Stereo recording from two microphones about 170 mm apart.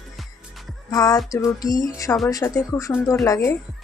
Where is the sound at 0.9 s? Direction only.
20° left (ahead or behind).